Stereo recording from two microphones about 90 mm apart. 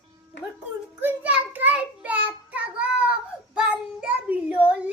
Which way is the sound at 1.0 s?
20° right (ahead or behind).